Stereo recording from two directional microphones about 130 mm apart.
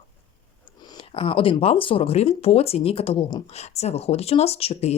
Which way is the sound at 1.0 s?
45° left (ahead or behind).